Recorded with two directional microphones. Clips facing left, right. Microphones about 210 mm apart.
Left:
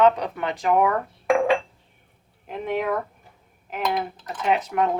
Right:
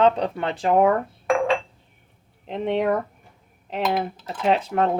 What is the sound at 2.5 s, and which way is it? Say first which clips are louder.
Speech: right 3 dB; 30° right (ahead or behind).